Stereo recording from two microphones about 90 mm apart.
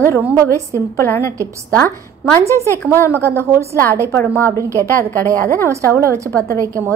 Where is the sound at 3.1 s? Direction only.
30° right (ahead or behind).